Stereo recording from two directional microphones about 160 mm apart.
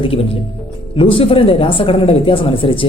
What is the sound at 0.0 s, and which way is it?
A woman's voice, 35° left (ahead or behind).